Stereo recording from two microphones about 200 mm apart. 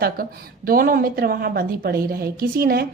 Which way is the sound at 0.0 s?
45° right (ahead or behind).